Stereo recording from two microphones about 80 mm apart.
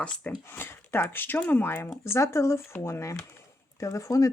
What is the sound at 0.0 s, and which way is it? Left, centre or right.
Speech, left.